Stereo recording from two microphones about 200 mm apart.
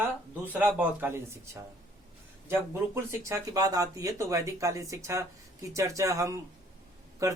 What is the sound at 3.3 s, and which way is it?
Speech, 15° right (ahead or behind).